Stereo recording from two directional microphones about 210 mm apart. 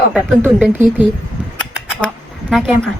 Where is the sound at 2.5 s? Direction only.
Centre (ahead or behind).